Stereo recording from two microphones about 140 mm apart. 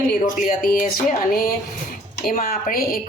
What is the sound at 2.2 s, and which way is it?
Speech, 85° left.